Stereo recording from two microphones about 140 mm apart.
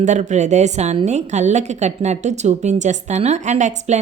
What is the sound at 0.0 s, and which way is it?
A woman's voice, 60° right (ahead or behind).